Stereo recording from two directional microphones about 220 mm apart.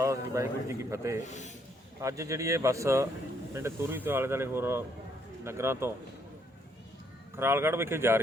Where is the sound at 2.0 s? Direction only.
15° right (ahead or behind).